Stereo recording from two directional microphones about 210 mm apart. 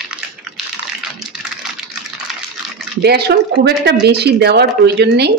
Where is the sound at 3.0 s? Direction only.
50° right (ahead or behind).